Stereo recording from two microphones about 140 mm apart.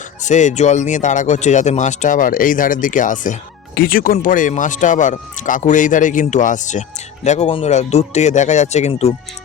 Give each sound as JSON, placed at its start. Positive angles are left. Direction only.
{"t": 0.2, "sound": "speech", "side_deg": 60}
{"t": 3.8, "sound": "speech", "side_deg": 90}
{"t": 7.4, "sound": "speech", "side_deg": 40}
{"t": 7.7, "sound": "speech", "side_deg": 55}